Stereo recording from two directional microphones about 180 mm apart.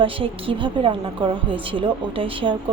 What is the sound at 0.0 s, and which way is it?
A woman's voice, 30° right (ahead or behind).